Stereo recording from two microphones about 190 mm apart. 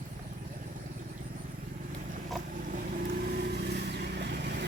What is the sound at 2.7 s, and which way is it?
Vehicle, 50° right (ahead or behind).